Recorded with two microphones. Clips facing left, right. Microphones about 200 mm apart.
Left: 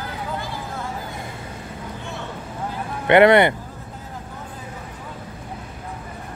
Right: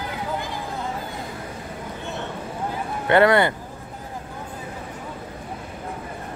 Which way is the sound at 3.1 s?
20° left (ahead or behind).